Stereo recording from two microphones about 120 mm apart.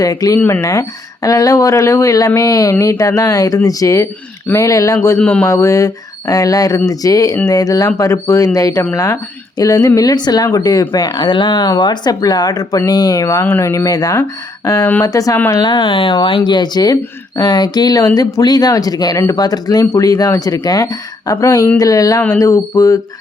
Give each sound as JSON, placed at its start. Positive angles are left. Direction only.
{"t": 0.0, "sound": "speech", "side_deg": 30}
{"t": 5.1, "sound": "a man's voice", "side_deg": 10}
{"t": 5.5, "sound": "a woman's voice", "side_deg": 25}